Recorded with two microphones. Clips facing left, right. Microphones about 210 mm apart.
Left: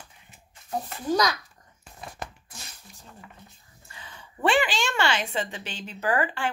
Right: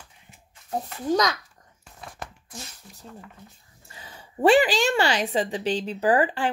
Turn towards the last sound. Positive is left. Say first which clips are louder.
# right 5 dB
turn(degrees=-35)  # may be behind; listen again after turning